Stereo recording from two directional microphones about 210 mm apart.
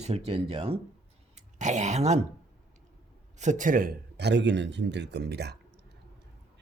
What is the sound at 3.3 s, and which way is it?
A man's voice, 35° right (ahead or behind).